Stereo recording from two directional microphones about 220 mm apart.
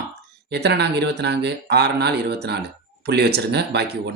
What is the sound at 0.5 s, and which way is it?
Speech, 50° right (ahead or behind).